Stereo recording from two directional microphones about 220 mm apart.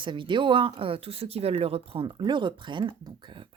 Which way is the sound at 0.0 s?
20° right (ahead or behind).